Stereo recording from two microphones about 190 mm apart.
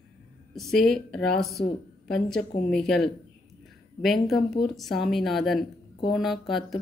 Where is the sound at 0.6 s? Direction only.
Centre (ahead or behind).